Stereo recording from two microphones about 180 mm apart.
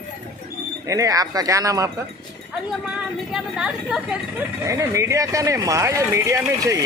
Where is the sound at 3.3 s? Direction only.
5° right (ahead or behind).